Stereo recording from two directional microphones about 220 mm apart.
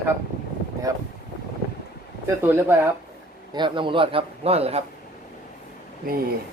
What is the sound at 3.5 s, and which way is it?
Speech, 20° right (ahead or behind).